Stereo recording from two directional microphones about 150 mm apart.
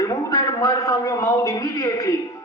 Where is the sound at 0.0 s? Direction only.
20° left (ahead or behind).